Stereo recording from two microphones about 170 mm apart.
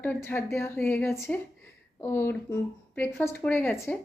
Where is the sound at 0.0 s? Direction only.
10° left (ahead or behind).